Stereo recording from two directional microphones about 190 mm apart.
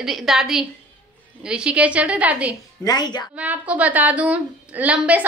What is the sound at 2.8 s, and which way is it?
Speech, 20° left (ahead or behind).